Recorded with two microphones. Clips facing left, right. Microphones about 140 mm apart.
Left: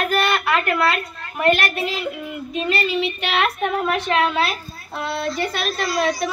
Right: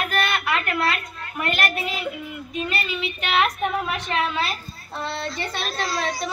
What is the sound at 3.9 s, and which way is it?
Speech, 70° left (ahead or behind).